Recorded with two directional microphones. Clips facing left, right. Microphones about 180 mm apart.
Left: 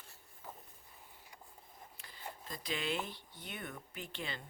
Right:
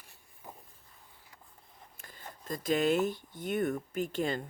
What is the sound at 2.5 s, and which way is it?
Speech, 45° right (ahead or behind).